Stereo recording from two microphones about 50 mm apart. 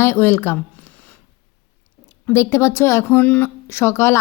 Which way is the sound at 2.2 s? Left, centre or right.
Left.